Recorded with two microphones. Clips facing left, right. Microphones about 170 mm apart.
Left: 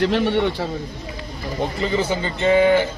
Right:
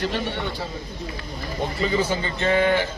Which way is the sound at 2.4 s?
15° left (ahead or behind).